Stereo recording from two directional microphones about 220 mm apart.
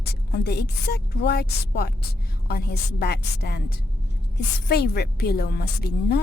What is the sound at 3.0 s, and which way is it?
Speech, 45° left (ahead or behind).